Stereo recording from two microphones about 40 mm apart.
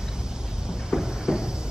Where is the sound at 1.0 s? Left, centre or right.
Centre.